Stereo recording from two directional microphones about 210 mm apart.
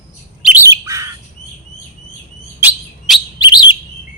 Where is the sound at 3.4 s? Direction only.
20° left (ahead or behind).